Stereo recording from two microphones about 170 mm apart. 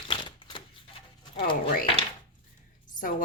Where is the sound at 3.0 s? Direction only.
50° left (ahead or behind).